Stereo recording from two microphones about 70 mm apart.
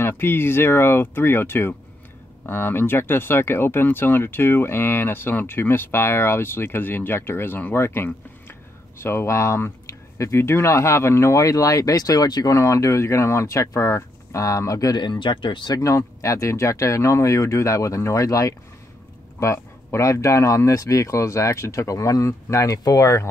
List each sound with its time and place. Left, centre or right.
0.0 s speech: left
16.2 s speech: left